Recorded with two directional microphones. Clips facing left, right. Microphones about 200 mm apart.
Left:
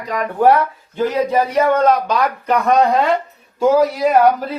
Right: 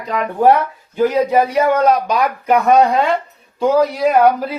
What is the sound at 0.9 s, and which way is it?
Speech, 10° right (ahead or behind).